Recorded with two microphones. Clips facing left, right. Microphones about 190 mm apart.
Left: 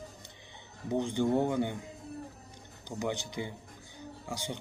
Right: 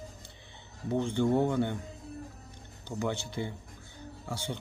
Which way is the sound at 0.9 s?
15° left (ahead or behind).